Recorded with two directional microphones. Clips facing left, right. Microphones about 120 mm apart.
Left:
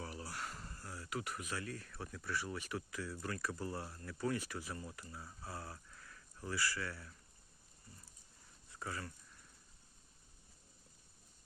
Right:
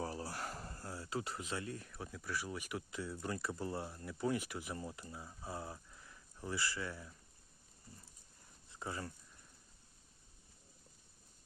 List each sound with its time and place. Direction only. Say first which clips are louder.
0.0 s a sound: right 4 dB; 35° right (ahead or behind); by 2.8 s 10° right (ahead or behind)
2.9 s speech: right 2 dB; 25° right (ahead or behind)
8.7 s speech: right 1 dB; 20° right (ahead or behind)